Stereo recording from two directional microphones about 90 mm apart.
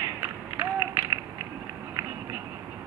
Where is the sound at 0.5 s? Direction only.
30° right (ahead or behind).